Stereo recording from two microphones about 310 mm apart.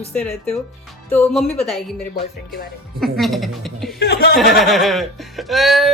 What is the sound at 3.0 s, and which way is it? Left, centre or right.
A woman's voice, centre.